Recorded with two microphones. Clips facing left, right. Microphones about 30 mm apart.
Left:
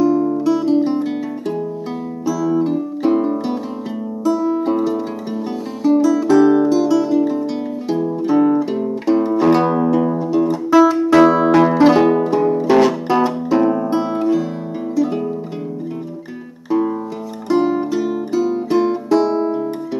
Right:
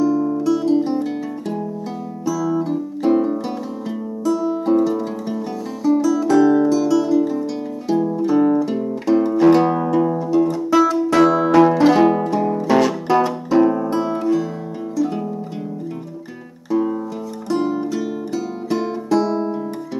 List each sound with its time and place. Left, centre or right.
0.0 s music: left
2.2 s music: centre
17.7 s music: centre